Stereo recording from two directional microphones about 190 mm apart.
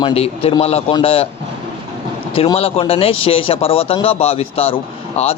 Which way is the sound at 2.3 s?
30° left (ahead or behind).